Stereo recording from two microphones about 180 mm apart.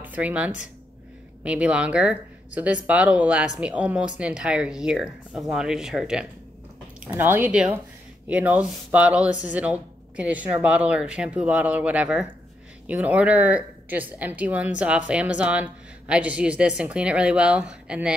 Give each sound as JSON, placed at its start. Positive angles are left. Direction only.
{"t": 0.0, "sound": "a woman's voice", "side_deg": -10}